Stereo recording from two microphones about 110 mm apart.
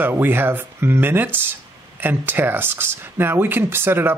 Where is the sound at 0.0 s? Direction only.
20° right (ahead or behind).